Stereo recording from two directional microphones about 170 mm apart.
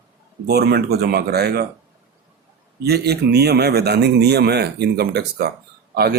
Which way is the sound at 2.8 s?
70° right (ahead or behind).